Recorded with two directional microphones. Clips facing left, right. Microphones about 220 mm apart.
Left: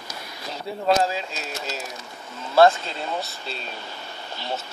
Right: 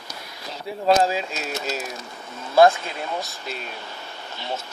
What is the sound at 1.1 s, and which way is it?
Speech, 10° right (ahead or behind).